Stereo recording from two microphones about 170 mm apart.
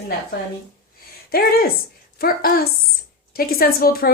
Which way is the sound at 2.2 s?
65° left (ahead or behind).